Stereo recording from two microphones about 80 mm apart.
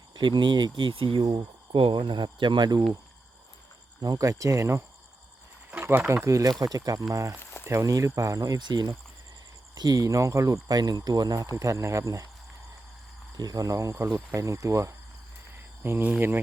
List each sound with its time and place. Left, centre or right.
0.1 s speech: right
4.0 s speech: right
5.8 s speech: right
6.2 s speech: right
8.5 s speech: right
10.1 s speech: right
11.5 s speech: right
13.3 s speech: right
15.8 s speech: right